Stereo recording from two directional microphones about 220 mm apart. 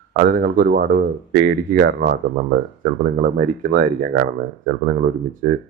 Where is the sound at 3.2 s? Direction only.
40° right (ahead or behind).